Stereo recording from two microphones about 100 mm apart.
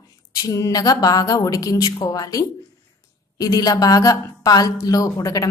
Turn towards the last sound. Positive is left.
turn(degrees=35)  # may be behind; listen again after turning